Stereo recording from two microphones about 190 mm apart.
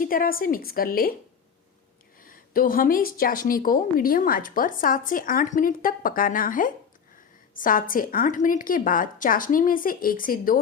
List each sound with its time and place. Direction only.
0.0 s a woman's voice: 50° left (ahead or behind)
2.2 s a woman's voice: 50° left (ahead or behind)